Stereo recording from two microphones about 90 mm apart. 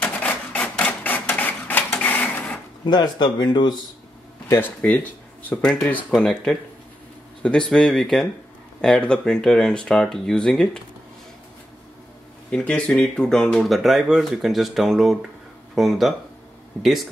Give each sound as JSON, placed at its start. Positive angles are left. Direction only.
{"t": 0.0, "sound": "a sound", "side_deg": 20}
{"t": 2.8, "sound": "speech", "side_deg": 55}
{"t": 4.5, "sound": "speech", "side_deg": 20}
{"t": 5.6, "sound": "speech", "side_deg": 5}
{"t": 12.4, "sound": "speech", "side_deg": 10}